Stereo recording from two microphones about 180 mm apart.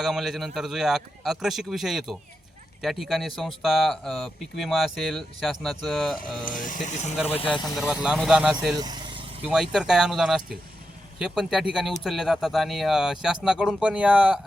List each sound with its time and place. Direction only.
0.0 s speech: centre (ahead or behind)
6.4 s speech: 45° left (ahead or behind)
7.8 s speech: 5° right (ahead or behind)
8.8 s vehicle: 20° right (ahead or behind)
9.5 s speech: centre (ahead or behind)